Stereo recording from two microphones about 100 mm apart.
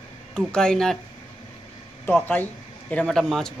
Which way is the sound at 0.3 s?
5° left (ahead or behind).